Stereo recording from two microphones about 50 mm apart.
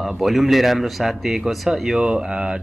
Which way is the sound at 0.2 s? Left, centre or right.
Centre.